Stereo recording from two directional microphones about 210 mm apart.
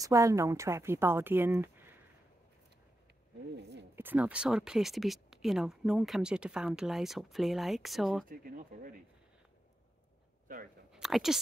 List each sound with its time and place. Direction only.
0.0 s speech: 15° right (ahead or behind)
3.9 s speech: 10° right (ahead or behind)
8.3 s speech: 40° right (ahead or behind)
10.9 s a sound: centre (ahead or behind)